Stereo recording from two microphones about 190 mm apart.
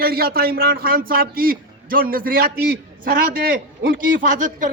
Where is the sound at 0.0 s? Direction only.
55° right (ahead or behind).